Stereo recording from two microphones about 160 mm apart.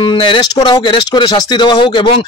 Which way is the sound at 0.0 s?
30° left (ahead or behind).